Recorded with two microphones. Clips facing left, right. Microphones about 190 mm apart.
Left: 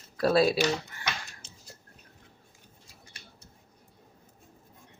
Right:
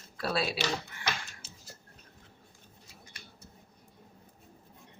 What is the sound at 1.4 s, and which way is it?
Dishes, 5° right (ahead or behind).